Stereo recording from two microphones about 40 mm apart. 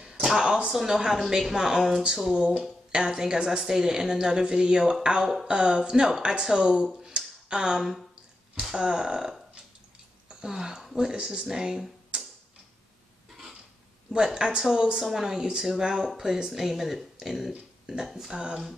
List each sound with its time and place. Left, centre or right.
0.0 s a sound: centre
0.7 s a woman's voice: centre
2.3 s a woman's voice: right
5.2 s a woman's voice: centre
5.5 s speech: right
7.2 s a sound: centre
8.7 s a woman's voice: centre
10.4 s a woman's voice: centre
14.1 s a woman's voice: centre
18.3 s speech: right